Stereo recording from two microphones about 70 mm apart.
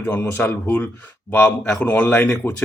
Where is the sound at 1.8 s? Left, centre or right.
Left.